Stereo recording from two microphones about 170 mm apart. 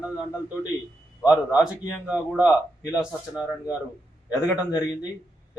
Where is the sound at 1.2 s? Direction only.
5° right (ahead or behind).